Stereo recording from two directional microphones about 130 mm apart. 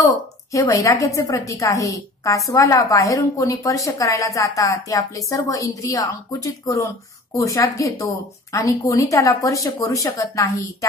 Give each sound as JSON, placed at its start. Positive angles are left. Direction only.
{"t": 0.0, "sound": "a woman's voice", "side_deg": 25}